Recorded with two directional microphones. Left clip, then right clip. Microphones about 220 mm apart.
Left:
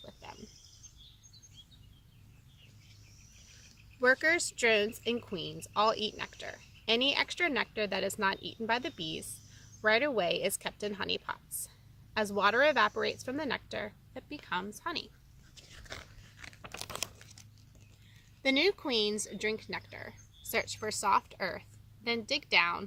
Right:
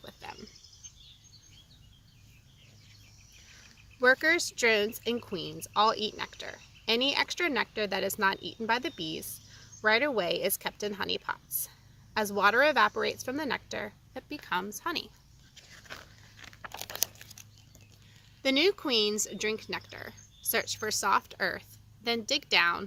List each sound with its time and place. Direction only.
0.0 s a sound: 20° right (ahead or behind)
4.0 s speech: 15° right (ahead or behind)
16.6 s crumpling: 5° left (ahead or behind)
18.4 s speech: 20° right (ahead or behind)